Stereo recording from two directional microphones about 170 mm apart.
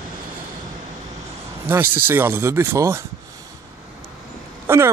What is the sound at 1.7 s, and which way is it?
Speech, 10° right (ahead or behind).